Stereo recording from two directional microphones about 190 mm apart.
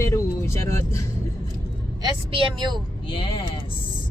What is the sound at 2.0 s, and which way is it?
Speech, 25° right (ahead or behind).